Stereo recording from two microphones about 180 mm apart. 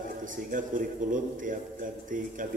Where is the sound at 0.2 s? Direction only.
45° right (ahead or behind).